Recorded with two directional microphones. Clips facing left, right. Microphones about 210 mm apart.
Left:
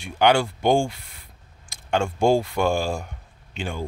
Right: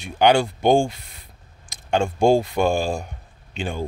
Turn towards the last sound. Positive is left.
turn(degrees=-20)  # may be behind; listen again after turning